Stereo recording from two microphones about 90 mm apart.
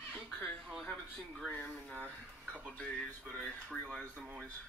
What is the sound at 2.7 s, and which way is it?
Speech, 15° left (ahead or behind).